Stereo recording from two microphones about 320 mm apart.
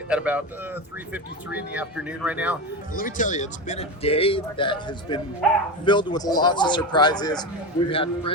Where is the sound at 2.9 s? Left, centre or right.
Left.